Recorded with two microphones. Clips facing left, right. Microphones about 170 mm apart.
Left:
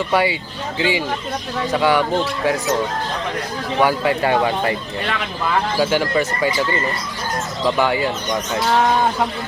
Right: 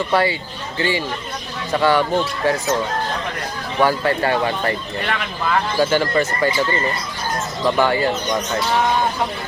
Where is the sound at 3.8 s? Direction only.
15° left (ahead or behind).